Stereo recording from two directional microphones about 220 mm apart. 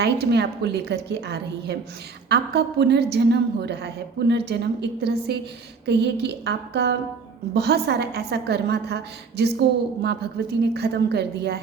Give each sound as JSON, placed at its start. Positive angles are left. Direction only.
{"t": 0.0, "sound": "a woman's voice", "side_deg": -50}